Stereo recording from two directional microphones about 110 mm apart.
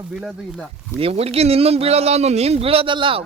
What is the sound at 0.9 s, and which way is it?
A man's voice, 65° right (ahead or behind).